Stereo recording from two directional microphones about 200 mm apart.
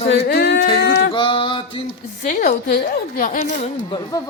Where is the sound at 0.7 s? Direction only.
50° left (ahead or behind).